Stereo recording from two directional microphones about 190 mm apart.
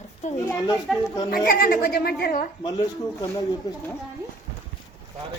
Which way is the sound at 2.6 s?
20° left (ahead or behind).